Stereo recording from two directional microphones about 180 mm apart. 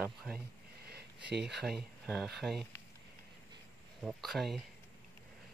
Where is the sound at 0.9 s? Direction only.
65° right (ahead or behind).